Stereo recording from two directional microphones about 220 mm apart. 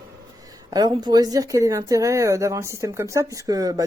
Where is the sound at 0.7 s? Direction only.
15° right (ahead or behind).